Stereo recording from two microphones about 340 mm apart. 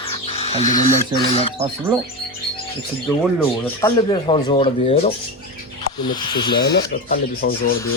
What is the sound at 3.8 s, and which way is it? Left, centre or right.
Speech, centre.